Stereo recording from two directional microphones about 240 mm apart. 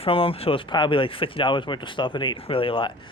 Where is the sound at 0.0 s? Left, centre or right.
Left.